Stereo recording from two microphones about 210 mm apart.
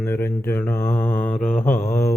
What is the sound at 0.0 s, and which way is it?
Speech, 10° left (ahead or behind).